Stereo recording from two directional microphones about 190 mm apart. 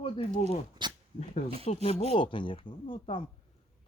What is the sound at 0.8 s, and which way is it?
Speech, 25° right (ahead or behind).